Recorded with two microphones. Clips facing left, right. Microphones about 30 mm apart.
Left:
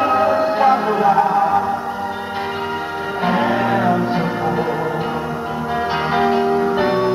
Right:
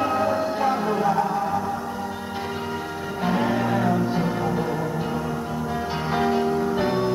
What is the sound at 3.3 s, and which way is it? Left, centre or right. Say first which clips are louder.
Music: left 5 dB; left.